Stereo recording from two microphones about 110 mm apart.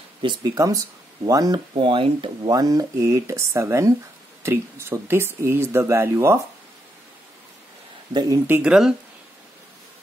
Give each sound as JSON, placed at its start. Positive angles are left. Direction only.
{"t": 0.2, "sound": "speech", "side_deg": -40}
{"t": 1.8, "sound": "speech", "side_deg": -50}
{"t": 2.5, "sound": "speech", "side_deg": -35}
{"t": 8.1, "sound": "speech", "side_deg": -35}
{"t": 8.5, "sound": "speech", "side_deg": -15}